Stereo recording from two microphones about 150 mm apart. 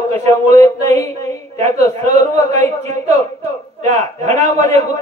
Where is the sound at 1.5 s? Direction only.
50° right (ahead or behind).